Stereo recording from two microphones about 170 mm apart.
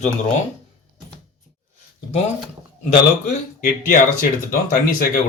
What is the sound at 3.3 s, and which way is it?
Speech, 55° left (ahead or behind).